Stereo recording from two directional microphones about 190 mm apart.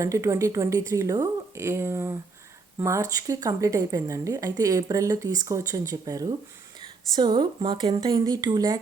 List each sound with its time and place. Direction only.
0.0 s speech: 15° right (ahead or behind)